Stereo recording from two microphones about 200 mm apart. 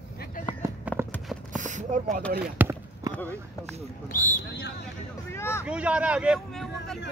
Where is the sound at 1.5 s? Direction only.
40° right (ahead or behind).